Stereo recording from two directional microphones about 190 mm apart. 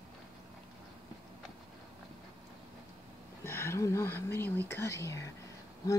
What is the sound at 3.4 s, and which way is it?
Speech, 15° left (ahead or behind).